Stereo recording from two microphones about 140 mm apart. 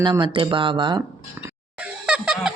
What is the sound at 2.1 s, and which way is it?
Music, 5° right (ahead or behind).